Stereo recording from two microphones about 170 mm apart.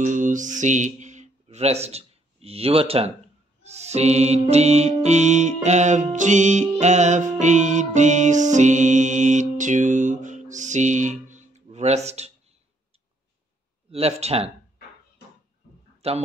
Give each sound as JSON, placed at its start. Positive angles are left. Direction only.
{"t": 0.0, "sound": "speech", "side_deg": -50}
{"t": 3.6, "sound": "music", "side_deg": -40}
{"t": 13.8, "sound": "speech", "side_deg": -35}
{"t": 16.0, "sound": "speech", "side_deg": -35}